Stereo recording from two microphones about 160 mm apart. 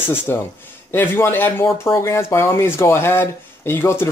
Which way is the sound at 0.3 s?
15° left (ahead or behind).